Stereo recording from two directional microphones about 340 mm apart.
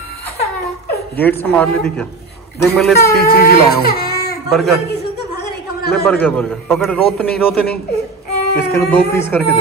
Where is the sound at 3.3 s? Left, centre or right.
Left.